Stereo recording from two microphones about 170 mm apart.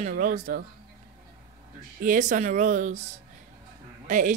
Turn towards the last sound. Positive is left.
turn(degrees=-50)  # may be behind; listen again after turning